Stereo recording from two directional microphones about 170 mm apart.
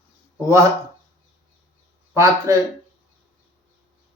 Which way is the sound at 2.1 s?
15° right (ahead or behind).